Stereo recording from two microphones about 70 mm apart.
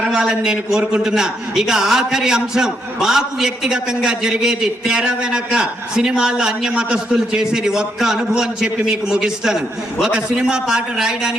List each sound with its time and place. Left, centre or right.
0.0 s a man's voice: centre